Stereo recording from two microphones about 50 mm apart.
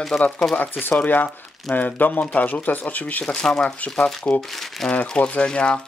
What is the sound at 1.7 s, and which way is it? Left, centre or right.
Speech, left.